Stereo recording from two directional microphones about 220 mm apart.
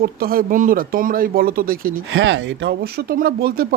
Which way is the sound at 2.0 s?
55° right (ahead or behind).